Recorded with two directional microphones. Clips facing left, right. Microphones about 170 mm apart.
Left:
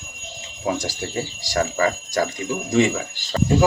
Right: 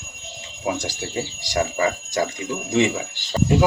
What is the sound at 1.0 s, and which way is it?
Speech, 15° right (ahead or behind).